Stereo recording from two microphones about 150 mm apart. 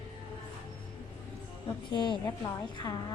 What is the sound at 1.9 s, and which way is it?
A woman's voice, 30° left (ahead or behind).